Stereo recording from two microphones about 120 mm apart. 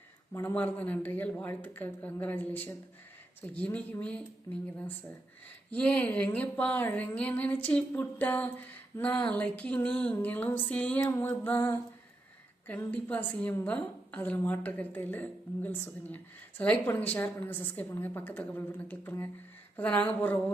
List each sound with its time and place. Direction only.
0.3 s a woman's voice: 15° left (ahead or behind)
4.5 s speech: 25° left (ahead or behind)
5.7 s a woman's voice: 10° left (ahead or behind)
11.0 s a woman's voice: 20° left (ahead or behind)